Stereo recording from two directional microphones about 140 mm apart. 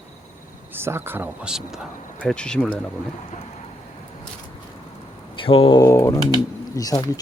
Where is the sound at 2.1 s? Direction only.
5° left (ahead or behind).